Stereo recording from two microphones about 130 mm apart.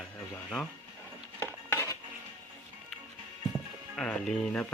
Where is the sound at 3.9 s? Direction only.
5° left (ahead or behind).